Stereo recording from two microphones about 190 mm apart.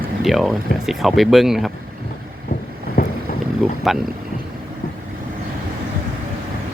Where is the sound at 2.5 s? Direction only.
45° left (ahead or behind).